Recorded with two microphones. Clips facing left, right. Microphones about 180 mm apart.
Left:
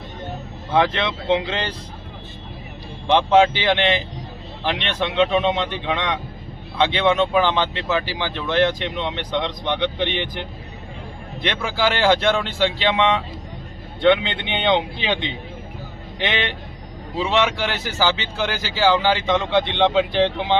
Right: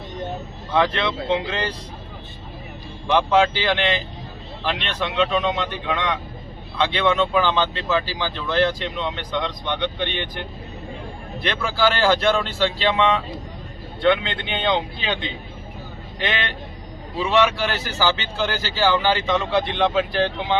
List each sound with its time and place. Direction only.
0.7 s speech: 20° left (ahead or behind)
3.1 s speech: 25° left (ahead or behind)
5.1 s speech: 25° left (ahead or behind)
11.4 s speech: 15° left (ahead or behind)